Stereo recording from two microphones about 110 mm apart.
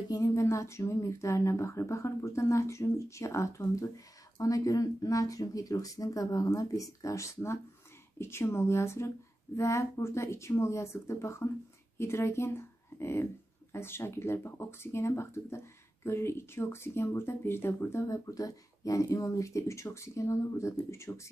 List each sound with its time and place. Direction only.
0.1 s a woman's voice: 30° left (ahead or behind)